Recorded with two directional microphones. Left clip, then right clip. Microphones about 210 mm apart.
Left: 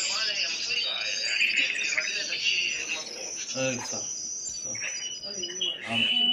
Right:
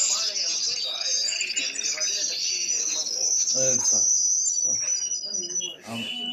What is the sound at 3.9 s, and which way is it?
Cricket, 90° right.